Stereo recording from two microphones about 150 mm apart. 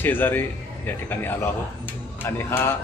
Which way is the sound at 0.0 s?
15° left (ahead or behind).